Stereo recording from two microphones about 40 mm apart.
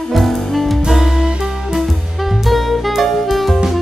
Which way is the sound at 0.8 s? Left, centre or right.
Centre.